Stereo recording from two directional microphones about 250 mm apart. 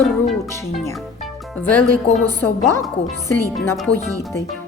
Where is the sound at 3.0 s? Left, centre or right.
Left.